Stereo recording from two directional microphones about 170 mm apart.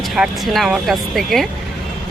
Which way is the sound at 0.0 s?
Centre (ahead or behind).